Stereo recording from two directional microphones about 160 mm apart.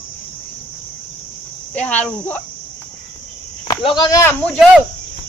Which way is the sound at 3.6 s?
30° left (ahead or behind).